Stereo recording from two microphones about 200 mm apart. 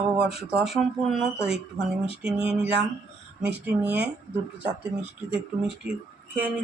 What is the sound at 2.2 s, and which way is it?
Speech, 5° right (ahead or behind).